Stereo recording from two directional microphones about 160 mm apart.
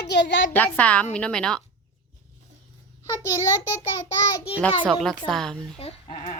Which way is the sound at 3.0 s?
20° left (ahead or behind).